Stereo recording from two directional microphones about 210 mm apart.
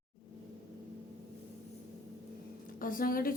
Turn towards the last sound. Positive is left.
turn(degrees=40)  # may be behind; listen again after turning